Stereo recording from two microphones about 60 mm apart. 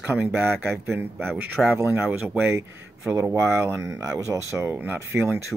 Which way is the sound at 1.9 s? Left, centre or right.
Right.